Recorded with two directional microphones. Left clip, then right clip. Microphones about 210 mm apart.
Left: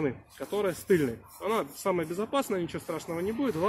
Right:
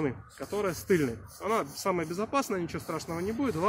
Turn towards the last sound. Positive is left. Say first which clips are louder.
# left 1 dB
turn(degrees=0)  # may be behind; listen again after turning